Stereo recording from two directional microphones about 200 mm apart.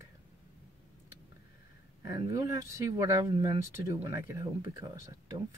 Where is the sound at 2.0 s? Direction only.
15° right (ahead or behind).